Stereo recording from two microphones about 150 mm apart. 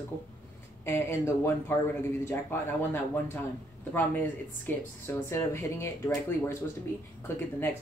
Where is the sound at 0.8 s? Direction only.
15° left (ahead or behind).